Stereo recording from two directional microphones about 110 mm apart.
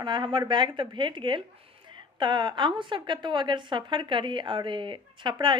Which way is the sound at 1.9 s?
45° right (ahead or behind).